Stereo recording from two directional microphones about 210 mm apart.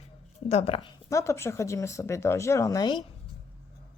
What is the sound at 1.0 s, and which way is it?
Speech, 15° left (ahead or behind).